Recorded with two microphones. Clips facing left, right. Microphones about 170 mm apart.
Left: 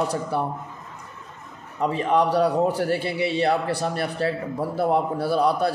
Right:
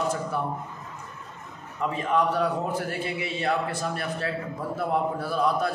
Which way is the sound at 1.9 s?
35° left (ahead or behind).